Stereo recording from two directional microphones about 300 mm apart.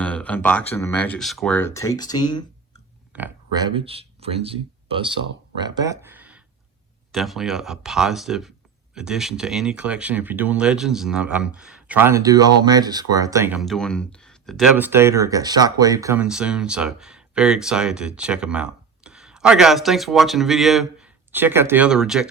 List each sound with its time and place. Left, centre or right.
0.0 s a sound: centre
0.7 s speech: centre
3.1 s speech: centre